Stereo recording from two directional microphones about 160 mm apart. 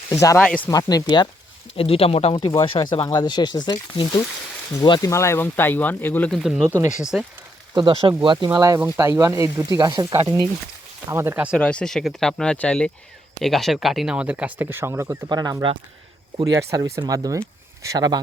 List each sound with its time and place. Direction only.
0.1 s speech: 20° left (ahead or behind)
0.3 s speech: 5° left (ahead or behind)
0.7 s speech: 20° left (ahead or behind); by 2.4 s 40° left (ahead or behind)
2.4 s speech: 25° left (ahead or behind); by 6.4 s 10° left (ahead or behind)
6.4 s speech: 5° right (ahead or behind)
7.8 s speech: 30° right (ahead or behind)
8.4 s speech: 20° right (ahead or behind)
11.5 s speech: 5° left (ahead or behind); by 18.2 s 25° right (ahead or behind)